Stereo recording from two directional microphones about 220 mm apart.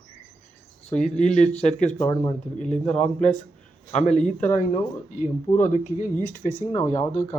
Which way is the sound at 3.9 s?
30° left (ahead or behind).